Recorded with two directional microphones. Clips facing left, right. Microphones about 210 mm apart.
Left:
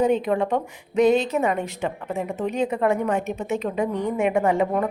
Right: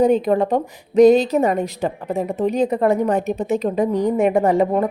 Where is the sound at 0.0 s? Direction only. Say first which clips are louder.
Right 5 dB; 35° right (ahead or behind).